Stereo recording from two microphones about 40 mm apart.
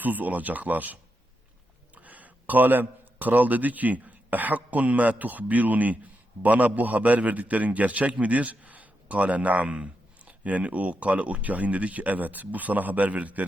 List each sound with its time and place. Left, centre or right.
0.0 s speech: right
2.0 s a man's voice: right